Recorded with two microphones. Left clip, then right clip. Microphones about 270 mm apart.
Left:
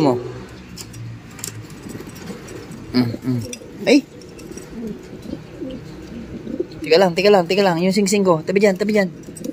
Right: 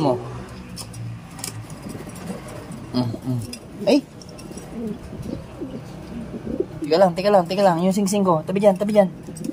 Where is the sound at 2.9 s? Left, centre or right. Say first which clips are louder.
Left 5 dB; centre.